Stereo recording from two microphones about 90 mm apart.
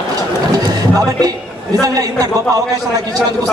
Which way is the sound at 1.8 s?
40° right (ahead or behind).